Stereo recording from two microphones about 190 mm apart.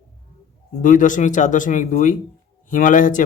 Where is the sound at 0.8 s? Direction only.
45° left (ahead or behind).